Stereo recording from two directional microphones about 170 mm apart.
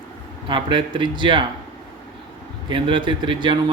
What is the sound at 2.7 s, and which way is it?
Speech, 30° right (ahead or behind).